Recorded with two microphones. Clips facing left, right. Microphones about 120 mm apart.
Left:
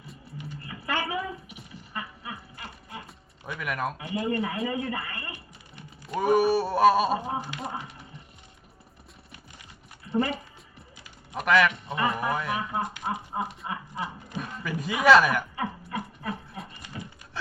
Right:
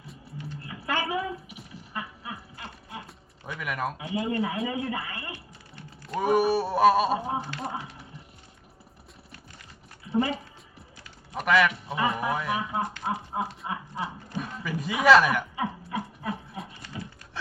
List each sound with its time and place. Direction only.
0.5 s a sound: centre (ahead or behind)
2.6 s music: 5° left (ahead or behind)
3.6 s a man's voice: centre (ahead or behind)
10.0 s a man's voice: 5° right (ahead or behind)
14.3 s chuckle: centre (ahead or behind)
16.9 s a sound: 5° right (ahead or behind)